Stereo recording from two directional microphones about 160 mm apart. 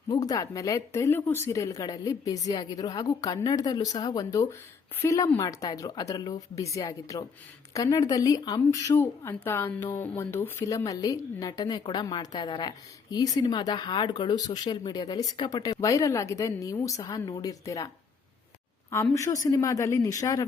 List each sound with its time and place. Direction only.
0.1 s speech: 25° left (ahead or behind)
19.1 s speech: 20° left (ahead or behind)